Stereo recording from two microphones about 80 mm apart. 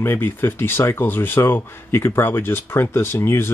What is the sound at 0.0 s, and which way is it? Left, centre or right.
Speech, left.